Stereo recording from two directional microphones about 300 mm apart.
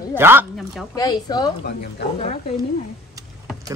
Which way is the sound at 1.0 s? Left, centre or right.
Centre.